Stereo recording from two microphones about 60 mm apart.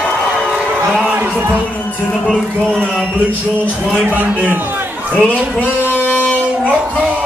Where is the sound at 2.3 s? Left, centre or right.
Centre.